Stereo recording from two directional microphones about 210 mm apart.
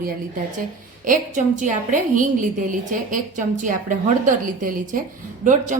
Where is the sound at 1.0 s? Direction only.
40° right (ahead or behind).